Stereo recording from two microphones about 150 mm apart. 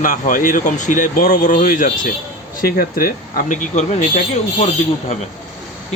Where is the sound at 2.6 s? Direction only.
80° left; by 4.0 s 55° left (ahead or behind).